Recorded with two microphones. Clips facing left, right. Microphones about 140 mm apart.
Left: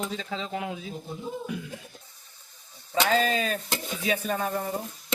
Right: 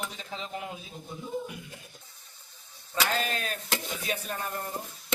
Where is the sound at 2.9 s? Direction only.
90° left.